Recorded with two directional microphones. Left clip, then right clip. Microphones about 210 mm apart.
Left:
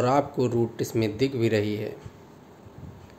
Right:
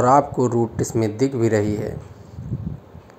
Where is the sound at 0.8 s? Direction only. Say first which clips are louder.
Right 5 dB; 5° left (ahead or behind).